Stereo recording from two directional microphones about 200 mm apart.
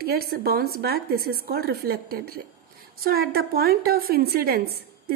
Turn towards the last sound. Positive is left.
turn(degrees=-50)  # may be behind; listen again after turning